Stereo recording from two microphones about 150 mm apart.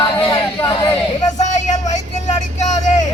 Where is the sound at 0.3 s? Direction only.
30° left (ahead or behind).